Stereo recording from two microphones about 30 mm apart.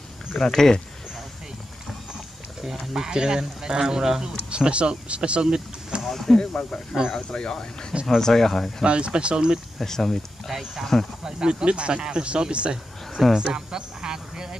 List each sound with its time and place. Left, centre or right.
0.3 s speech: left
2.6 s speech: centre
3.0 s speech: right
4.5 s speech: right
6.0 s a sound: centre
6.5 s speech: left
8.2 s speech: centre
8.8 s speech: right
9.8 s speech: centre
10.5 s speech: centre
11.2 s speech: right
13.3 s a sound: right